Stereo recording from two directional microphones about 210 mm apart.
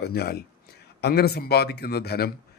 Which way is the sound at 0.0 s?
50° left (ahead or behind).